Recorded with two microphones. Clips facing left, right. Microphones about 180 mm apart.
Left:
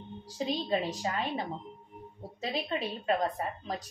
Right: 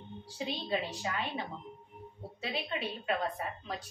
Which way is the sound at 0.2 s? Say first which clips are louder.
Left 5 dB; 40° left (ahead or behind).